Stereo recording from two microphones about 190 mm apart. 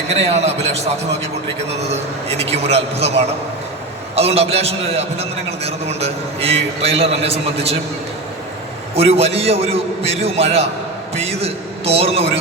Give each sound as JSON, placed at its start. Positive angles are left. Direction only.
{"t": 0.1, "sound": "a man's voice", "side_deg": -35}
{"t": 1.9, "sound": "a man's voice", "side_deg": -30}
{"t": 4.1, "sound": "a man's voice", "side_deg": -30}
{"t": 9.0, "sound": "a man's voice", "side_deg": -30}
{"t": 11.2, "sound": "a sound", "side_deg": -35}